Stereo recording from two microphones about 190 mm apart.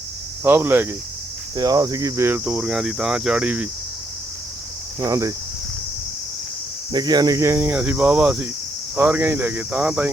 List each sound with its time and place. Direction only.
0.4 s speech: 10° right (ahead or behind)
4.9 s speech: 15° right (ahead or behind)
6.9 s speech: 20° right (ahead or behind)